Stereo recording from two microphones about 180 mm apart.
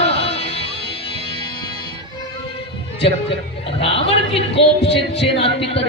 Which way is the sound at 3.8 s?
35° left (ahead or behind).